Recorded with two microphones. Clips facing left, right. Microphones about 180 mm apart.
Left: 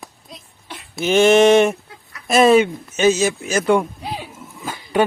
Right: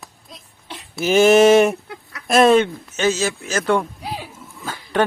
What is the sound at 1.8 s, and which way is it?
Chicken, 70° right (ahead or behind).